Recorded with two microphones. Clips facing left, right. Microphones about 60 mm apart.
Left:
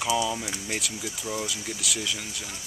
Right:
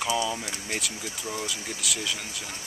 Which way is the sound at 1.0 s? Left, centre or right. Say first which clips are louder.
Left 2 dB; centre.